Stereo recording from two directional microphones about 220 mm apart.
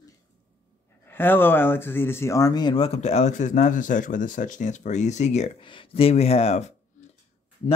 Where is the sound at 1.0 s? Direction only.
10° left (ahead or behind); by 6.7 s 30° left (ahead or behind).